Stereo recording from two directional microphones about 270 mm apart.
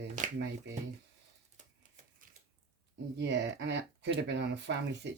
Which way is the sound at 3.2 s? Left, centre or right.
Right.